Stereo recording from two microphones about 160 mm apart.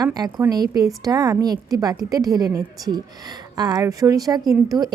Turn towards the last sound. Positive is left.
turn(degrees=-25)  # may be behind; listen again after turning